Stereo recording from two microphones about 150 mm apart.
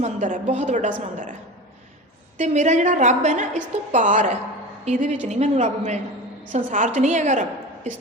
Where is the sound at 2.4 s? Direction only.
55° right (ahead or behind).